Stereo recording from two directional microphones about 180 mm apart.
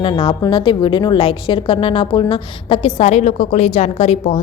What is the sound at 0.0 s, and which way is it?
A woman's voice, 25° left (ahead or behind).